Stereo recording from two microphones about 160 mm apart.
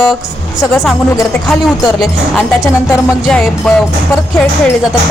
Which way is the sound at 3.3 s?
5° left (ahead or behind).